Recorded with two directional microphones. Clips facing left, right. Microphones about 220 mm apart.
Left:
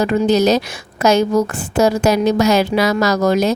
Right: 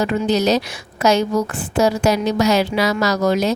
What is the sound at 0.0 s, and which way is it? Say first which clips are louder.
A woman's voice: left 4 dB; 45° left (ahead or behind).